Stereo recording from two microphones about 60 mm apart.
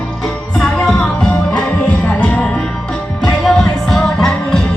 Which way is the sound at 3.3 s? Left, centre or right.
Centre.